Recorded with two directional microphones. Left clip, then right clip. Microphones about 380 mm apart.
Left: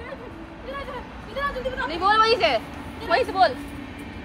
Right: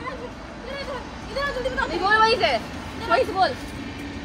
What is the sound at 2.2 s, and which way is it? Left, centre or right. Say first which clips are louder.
Speech: even; left.